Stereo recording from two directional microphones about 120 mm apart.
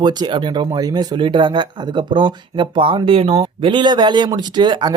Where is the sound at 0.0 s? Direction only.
35° right (ahead or behind).